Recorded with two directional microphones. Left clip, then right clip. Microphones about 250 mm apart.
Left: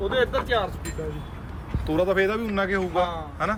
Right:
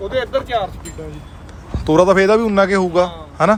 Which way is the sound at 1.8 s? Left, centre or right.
Right.